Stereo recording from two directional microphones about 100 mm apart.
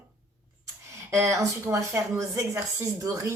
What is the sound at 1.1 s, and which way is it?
A woman's voice, 30° right (ahead or behind).